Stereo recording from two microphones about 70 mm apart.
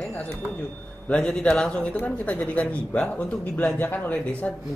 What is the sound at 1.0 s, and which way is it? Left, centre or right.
A man's voice, centre.